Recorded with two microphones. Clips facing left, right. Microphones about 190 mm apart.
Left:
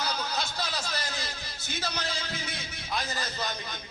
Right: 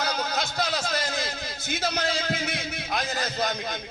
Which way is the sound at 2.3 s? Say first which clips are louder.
Right 8 dB; 90° right.